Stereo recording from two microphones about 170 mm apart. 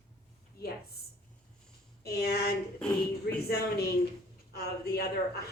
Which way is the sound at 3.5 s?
70° left (ahead or behind).